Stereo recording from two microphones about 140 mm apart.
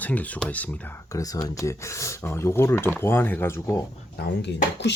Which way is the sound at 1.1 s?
25° left (ahead or behind).